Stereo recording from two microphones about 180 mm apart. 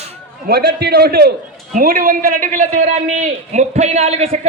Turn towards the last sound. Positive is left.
turn(degrees=-35)  # may be behind; listen again after turning